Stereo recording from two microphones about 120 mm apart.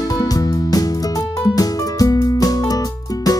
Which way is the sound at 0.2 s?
30° left (ahead or behind).